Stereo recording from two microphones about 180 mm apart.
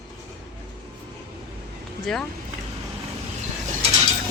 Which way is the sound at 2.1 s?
Centre (ahead or behind).